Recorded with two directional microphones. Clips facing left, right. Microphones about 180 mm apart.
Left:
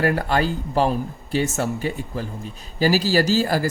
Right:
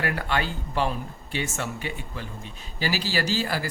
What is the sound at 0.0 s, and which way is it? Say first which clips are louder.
Speech: left 7 dB; 40° left (ahead or behind).